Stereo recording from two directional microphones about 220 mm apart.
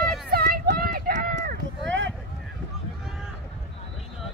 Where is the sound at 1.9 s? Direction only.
55° right (ahead or behind).